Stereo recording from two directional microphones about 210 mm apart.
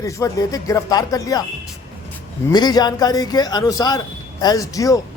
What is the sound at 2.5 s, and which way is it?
A man's voice, 20° left (ahead or behind).